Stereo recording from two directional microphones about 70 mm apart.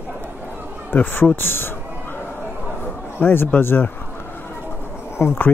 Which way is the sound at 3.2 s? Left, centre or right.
Left.